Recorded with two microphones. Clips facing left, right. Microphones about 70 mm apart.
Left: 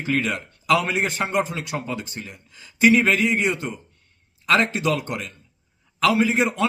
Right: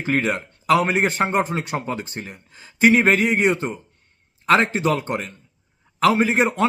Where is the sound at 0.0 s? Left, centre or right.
Right.